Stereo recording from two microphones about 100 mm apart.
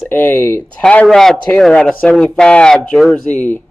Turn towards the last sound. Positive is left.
turn(degrees=15)  # may be behind; listen again after turning